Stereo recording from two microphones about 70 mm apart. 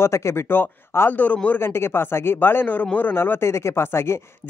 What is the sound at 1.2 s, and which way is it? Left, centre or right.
Speech, left.